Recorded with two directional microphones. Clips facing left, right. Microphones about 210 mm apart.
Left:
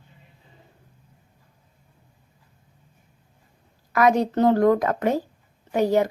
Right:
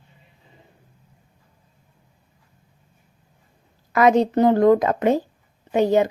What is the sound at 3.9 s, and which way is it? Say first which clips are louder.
A woman's voice: right 3 dB; 25° right (ahead or behind).